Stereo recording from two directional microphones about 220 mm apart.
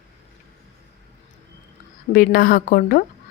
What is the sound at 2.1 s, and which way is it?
Speech, 40° left (ahead or behind).